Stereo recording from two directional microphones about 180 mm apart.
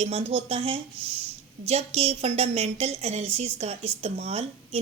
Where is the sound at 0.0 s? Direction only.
35° right (ahead or behind).